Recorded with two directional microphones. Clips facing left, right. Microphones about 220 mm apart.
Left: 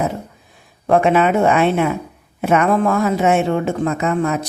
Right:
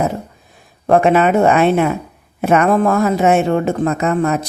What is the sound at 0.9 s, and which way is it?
Speech, 40° right (ahead or behind).